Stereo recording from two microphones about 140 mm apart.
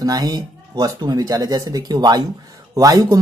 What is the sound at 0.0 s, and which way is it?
Speech, 25° right (ahead or behind).